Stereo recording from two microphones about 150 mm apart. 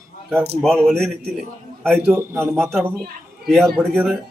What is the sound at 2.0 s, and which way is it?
Speech, 15° right (ahead or behind).